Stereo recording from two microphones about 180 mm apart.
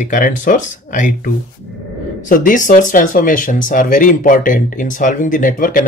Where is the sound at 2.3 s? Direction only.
45° left (ahead or behind).